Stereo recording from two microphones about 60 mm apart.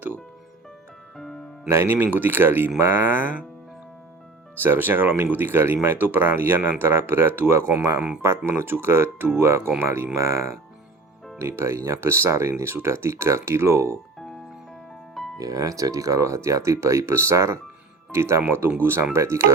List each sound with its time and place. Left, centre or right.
1.1 s music: centre
1.7 s speech: right
2.0 s speech: right
4.5 s speech: right
8.4 s speech: right
9.4 s speech: right
15.4 s speech: right